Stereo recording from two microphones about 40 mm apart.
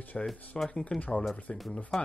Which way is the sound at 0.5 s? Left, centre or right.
Left.